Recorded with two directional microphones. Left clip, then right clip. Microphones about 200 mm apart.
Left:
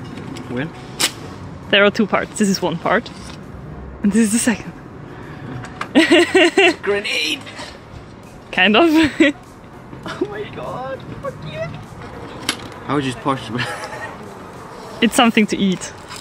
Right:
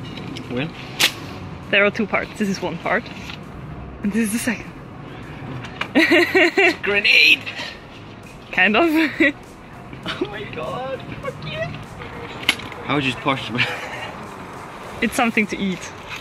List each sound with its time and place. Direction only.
0.3 s vehicle: 10° left (ahead or behind)
1.7 s speech: 30° left (ahead or behind)
5.8 s speech: 20° left (ahead or behind)
6.9 s speech: 10° left (ahead or behind)
8.5 s speech: 25° left (ahead or behind)
10.0 s music: 10° left (ahead or behind)
12.4 s speech: 10° left (ahead or behind)
15.0 s speech: 35° left (ahead or behind)